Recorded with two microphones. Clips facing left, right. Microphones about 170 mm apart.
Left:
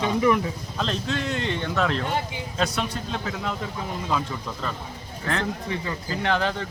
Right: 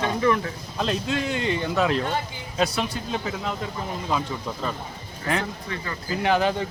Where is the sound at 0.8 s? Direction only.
5° right (ahead or behind).